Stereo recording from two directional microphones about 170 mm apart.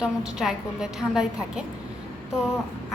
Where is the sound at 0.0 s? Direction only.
5° right (ahead or behind).